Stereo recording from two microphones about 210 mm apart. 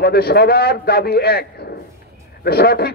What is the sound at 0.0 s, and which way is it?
A man's voice, 50° left (ahead or behind).